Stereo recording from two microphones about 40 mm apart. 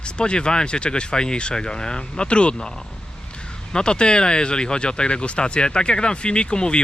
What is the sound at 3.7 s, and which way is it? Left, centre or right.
A man's voice, left.